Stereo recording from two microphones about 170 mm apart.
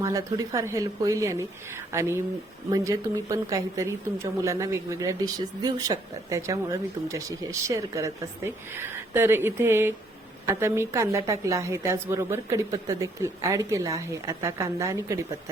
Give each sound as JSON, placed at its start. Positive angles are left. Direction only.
{"t": 0.0, "sound": "a woman's voice", "side_deg": -20}